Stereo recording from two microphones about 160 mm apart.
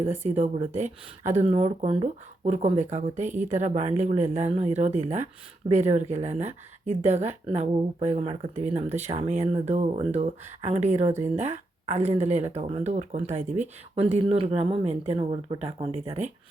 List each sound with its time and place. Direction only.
0.1 s speech: 45° right (ahead or behind)